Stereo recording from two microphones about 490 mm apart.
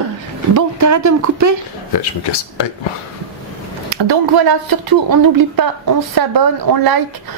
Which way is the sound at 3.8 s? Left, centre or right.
Right.